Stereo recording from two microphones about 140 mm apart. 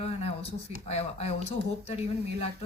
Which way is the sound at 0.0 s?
45° left (ahead or behind).